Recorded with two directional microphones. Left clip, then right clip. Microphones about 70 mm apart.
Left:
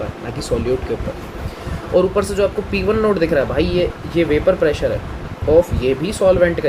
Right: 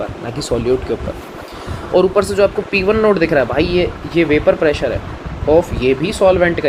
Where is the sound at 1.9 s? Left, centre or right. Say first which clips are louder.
Right 3 dB; right.